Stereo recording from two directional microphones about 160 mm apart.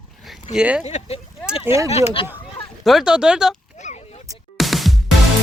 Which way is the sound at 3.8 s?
45° left (ahead or behind).